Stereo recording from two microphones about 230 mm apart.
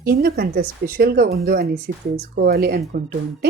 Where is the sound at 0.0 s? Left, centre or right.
Right.